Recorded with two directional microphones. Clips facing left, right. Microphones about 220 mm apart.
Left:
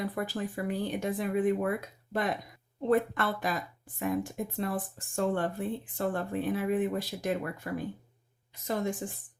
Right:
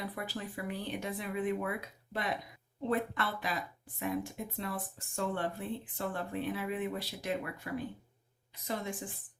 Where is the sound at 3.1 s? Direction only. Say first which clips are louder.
Left 5 dB; 45° left (ahead or behind).